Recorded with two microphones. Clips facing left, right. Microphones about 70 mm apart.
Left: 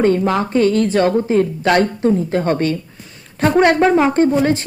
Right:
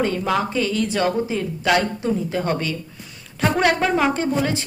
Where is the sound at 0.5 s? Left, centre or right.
Left.